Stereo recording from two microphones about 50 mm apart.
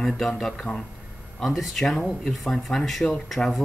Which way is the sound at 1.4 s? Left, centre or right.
Centre.